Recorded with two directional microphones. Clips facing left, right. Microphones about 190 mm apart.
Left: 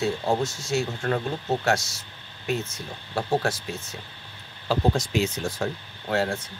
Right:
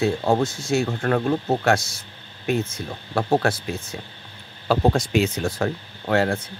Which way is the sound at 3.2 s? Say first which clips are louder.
Right 4 dB; 60° right (ahead or behind).